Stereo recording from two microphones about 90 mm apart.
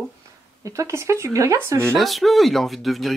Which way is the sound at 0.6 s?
35° right (ahead or behind).